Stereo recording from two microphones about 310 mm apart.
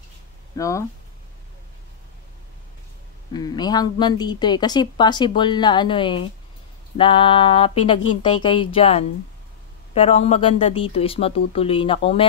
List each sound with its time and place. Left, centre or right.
0.6 s speech: centre
3.3 s speech: centre